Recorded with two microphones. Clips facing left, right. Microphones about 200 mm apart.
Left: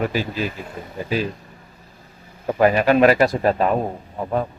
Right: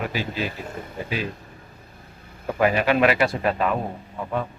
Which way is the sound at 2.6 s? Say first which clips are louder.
Left 4 dB; 40° left (ahead or behind).